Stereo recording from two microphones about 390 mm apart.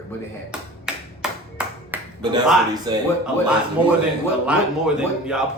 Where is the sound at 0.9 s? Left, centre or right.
Centre.